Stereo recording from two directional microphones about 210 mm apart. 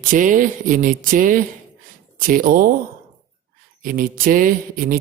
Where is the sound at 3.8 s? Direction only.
45° right (ahead or behind).